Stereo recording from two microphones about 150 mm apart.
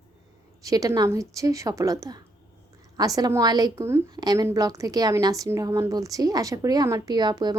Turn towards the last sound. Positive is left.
turn(degrees=-25)  # may be behind; listen again after turning